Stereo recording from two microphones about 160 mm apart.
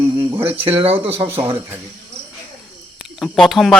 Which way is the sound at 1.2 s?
15° right (ahead or behind).